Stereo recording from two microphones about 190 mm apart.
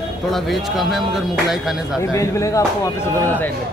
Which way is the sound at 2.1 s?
15° left (ahead or behind).